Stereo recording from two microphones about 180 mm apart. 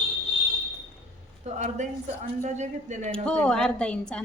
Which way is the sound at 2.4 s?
40° right (ahead or behind).